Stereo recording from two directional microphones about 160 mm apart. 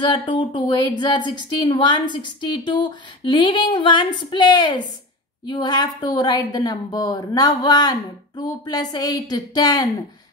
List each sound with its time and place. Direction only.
0.1 s a woman's voice: 30° left (ahead or behind)